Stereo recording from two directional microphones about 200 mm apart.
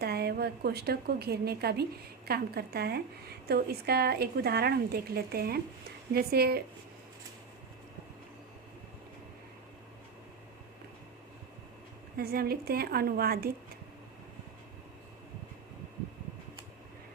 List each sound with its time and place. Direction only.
0.0 s a woman's voice: 50° right (ahead or behind)
12.1 s speech: 50° right (ahead or behind)